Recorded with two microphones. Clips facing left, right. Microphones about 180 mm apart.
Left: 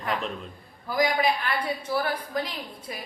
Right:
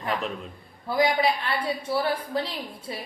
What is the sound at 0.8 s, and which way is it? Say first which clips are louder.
A woman's voice: right 1 dB; 25° right (ahead or behind).